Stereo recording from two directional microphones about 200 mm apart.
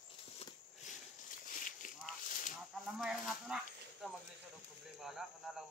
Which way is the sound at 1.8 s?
40° left (ahead or behind).